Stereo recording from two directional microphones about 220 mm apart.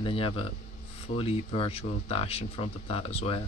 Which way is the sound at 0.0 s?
25° left (ahead or behind).